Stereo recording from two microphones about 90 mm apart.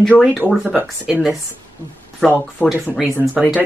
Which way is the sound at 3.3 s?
Centre (ahead or behind).